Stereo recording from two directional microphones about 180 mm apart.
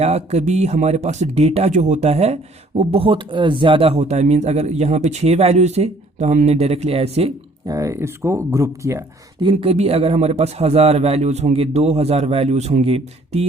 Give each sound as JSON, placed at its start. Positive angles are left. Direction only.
{"t": 0.0, "sound": "speech", "side_deg": -35}
{"t": 7.7, "sound": "speech", "side_deg": -15}
{"t": 9.4, "sound": "speech", "side_deg": -30}